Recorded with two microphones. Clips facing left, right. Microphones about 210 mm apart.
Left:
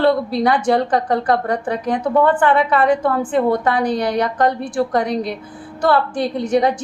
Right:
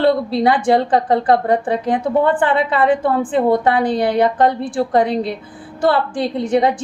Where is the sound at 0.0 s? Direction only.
25° right (ahead or behind).